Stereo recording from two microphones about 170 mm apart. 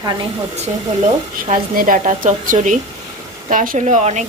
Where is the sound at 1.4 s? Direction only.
50° right (ahead or behind).